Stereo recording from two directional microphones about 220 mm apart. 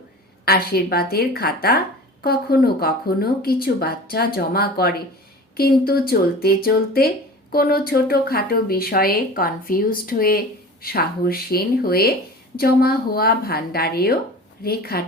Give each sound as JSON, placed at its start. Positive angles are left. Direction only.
{"t": 0.4, "sound": "speech", "side_deg": 45}